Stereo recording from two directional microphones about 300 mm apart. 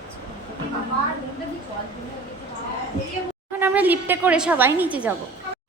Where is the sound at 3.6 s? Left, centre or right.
Centre.